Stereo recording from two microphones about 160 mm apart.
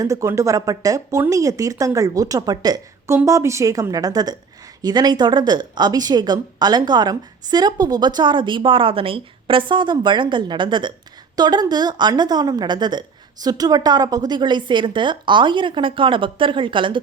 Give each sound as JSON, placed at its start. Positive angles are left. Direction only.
{"t": 0.0, "sound": "speech", "side_deg": -20}